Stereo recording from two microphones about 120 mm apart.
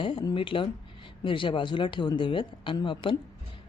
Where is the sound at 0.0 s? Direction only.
45° left (ahead or behind).